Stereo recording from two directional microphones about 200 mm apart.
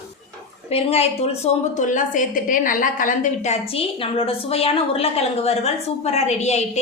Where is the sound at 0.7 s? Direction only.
30° left (ahead or behind).